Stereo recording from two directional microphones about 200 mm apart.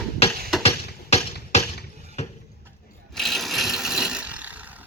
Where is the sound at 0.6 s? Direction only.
30° left (ahead or behind).